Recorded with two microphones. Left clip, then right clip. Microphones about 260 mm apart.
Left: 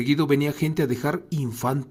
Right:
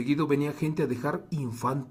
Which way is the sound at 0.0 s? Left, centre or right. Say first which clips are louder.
Left 5 dB; left.